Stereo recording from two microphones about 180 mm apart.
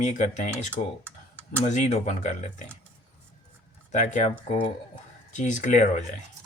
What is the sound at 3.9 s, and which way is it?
Speech, 40° left (ahead or behind).